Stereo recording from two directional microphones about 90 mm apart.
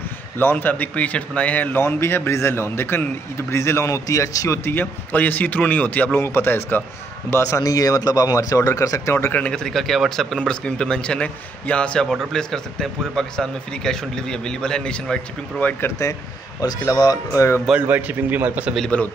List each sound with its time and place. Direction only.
0.4 s speech: 25° left (ahead or behind)
4.6 s speech: 20° left (ahead or behind)
9.3 s speech: 10° left (ahead or behind)
15.6 s speech: 20° left (ahead or behind)
16.0 s a man's voice: 35° left (ahead or behind)
17.7 s a man's voice: 20° right (ahead or behind)